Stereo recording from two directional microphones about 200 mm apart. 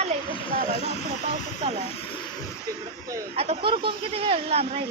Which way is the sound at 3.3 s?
30° right (ahead or behind).